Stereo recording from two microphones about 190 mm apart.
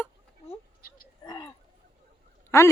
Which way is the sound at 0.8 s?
50° left (ahead or behind).